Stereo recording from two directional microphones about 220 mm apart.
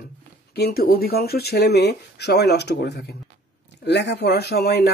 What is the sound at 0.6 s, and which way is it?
Speech, 45° left (ahead or behind).